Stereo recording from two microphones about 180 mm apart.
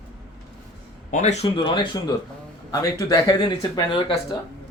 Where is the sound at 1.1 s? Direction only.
40° left (ahead or behind).